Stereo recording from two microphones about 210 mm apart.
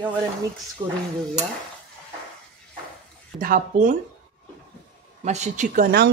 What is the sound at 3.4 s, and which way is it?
Speech, 40° right (ahead or behind).